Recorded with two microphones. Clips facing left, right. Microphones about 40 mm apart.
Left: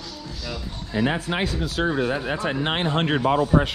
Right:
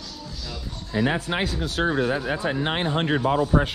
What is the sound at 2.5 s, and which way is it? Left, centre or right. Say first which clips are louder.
Speech: left 2 dB; left.